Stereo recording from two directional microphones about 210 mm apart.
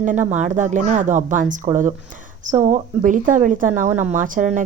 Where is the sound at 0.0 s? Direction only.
35° right (ahead or behind).